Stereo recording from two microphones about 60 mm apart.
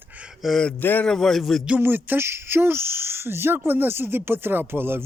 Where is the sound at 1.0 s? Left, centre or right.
Centre.